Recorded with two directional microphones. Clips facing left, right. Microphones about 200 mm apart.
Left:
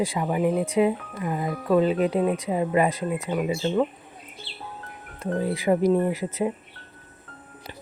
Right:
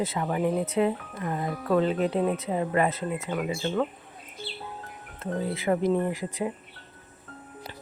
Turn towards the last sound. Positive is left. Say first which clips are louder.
# left 4 dB
turn(degrees=20)  # may be behind; listen again after turning